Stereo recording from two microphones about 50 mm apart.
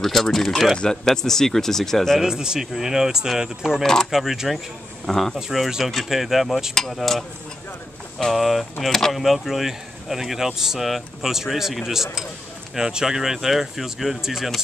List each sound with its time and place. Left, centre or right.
0.0 s speech: centre
2.1 s speech: centre
3.8 s speech: centre
4.1 s speech: centre